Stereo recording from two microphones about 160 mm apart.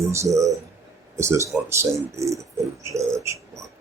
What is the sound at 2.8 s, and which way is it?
Bird, 20° right (ahead or behind).